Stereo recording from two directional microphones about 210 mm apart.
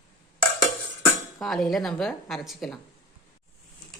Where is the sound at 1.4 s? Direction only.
Centre (ahead or behind).